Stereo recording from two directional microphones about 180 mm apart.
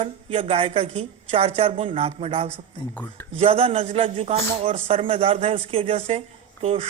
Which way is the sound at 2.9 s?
10° left (ahead or behind).